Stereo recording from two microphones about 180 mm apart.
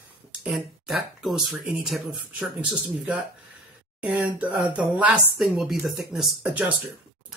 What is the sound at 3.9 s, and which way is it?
A woman's voice, 5° right (ahead or behind).